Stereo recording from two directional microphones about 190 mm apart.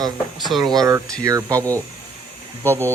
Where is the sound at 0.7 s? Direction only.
15° right (ahead or behind).